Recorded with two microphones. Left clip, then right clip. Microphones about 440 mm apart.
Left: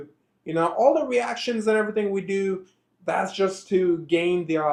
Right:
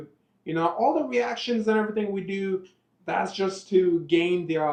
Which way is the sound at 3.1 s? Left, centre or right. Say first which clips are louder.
Left 3 dB; centre.